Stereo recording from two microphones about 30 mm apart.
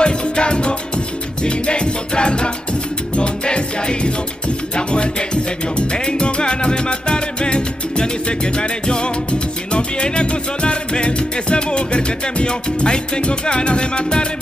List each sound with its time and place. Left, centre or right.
0.0 s music: left